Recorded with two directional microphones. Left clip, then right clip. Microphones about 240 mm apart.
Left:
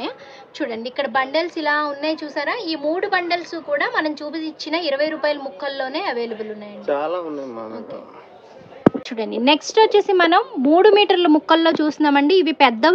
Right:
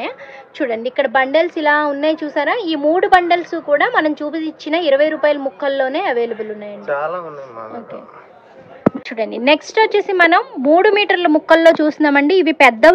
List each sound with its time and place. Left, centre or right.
0.6 s a woman's voice: centre
6.9 s speech: left
9.1 s a woman's voice: centre